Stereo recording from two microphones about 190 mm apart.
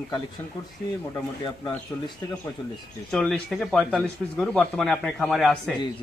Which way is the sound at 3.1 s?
Centre (ahead or behind).